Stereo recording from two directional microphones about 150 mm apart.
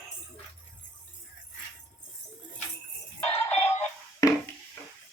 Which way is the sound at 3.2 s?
40° left (ahead or behind).